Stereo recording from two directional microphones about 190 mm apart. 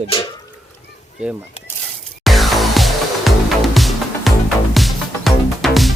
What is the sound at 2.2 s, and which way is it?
Music, centre (ahead or behind).